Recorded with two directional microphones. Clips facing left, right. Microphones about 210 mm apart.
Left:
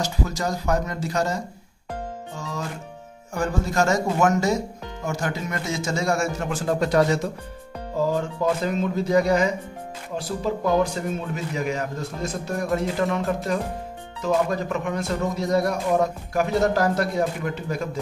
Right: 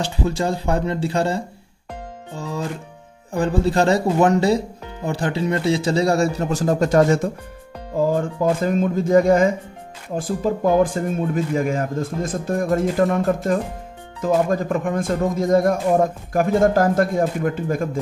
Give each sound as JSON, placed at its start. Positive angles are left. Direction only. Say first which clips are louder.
{"t": 0.0, "sound": "a man's voice", "louder": "right 4 dB", "side_deg": -30}